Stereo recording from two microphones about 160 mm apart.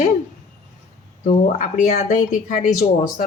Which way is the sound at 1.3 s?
50° left (ahead or behind).